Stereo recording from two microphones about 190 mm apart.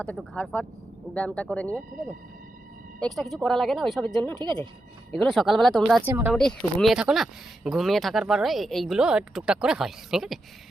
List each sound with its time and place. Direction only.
0.0 s speech: 5° left (ahead or behind)
3.0 s speech: centre (ahead or behind)
4.4 s speech: 25° right (ahead or behind)
5.1 s speech: centre (ahead or behind)